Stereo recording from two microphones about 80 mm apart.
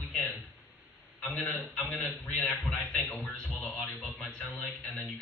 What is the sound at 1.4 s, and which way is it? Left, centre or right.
A man's voice, centre.